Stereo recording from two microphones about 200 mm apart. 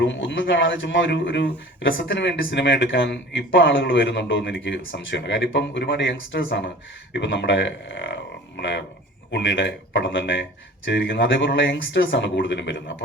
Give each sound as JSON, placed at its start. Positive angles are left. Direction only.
{"t": 0.0, "sound": "a man's voice", "side_deg": 65}